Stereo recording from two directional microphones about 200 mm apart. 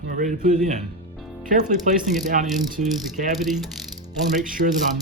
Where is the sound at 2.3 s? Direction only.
40° right (ahead or behind).